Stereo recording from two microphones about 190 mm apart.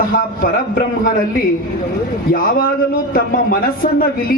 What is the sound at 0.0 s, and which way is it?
A woman's voice, 45° left (ahead or behind).